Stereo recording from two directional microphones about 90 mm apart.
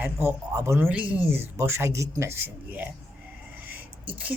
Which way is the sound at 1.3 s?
25° right (ahead or behind).